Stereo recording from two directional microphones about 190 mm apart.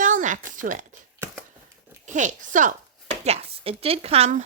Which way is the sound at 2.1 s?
40° right (ahead or behind).